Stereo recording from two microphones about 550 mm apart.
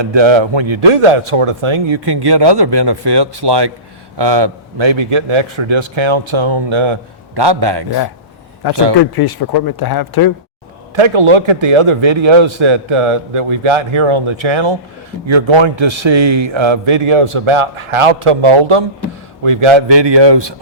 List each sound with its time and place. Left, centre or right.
0.0 s a man's voice: right
8.6 s speech: left
10.9 s a man's voice: right